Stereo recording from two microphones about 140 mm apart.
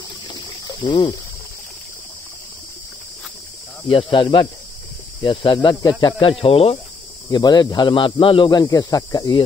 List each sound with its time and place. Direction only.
0.3 s a sound: 35° left (ahead or behind)
4.1 s speech: 35° left (ahead or behind)
6.4 s speech: 45° left (ahead or behind)
7.2 s speech: 30° left (ahead or behind)